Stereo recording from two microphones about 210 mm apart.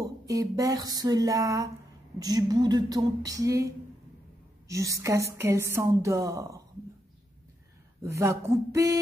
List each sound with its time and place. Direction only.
0.0 s a woman's voice: 15° right (ahead or behind)
8.0 s a woman's voice: 15° right (ahead or behind)